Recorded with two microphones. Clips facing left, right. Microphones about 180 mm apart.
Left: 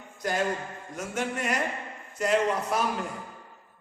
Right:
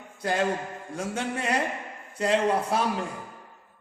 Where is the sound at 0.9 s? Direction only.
30° right (ahead or behind).